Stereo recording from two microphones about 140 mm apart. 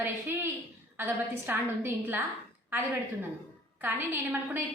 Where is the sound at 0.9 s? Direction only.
15° right (ahead or behind).